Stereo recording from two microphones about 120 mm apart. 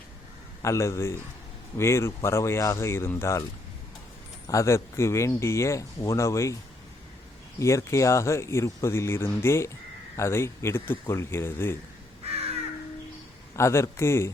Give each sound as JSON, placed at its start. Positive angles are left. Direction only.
{"t": 0.6, "sound": "speech", "side_deg": 25}
{"t": 4.4, "sound": "speech", "side_deg": 25}
{"t": 7.6, "sound": "speech", "side_deg": 25}
{"t": 13.6, "sound": "speech", "side_deg": 25}